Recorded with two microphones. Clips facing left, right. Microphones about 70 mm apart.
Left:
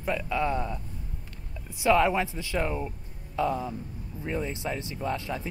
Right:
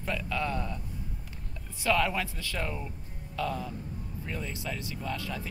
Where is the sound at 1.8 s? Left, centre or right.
Left.